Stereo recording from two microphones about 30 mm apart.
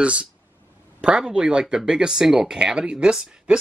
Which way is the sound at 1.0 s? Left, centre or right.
Right.